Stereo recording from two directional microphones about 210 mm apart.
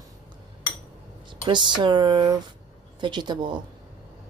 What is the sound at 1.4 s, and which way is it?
Speech, 20° right (ahead or behind).